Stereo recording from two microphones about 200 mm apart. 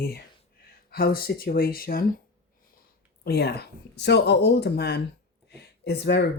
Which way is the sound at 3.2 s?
55° left (ahead or behind).